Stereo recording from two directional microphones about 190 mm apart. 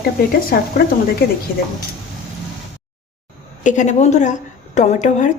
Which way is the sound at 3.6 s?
40° left (ahead or behind).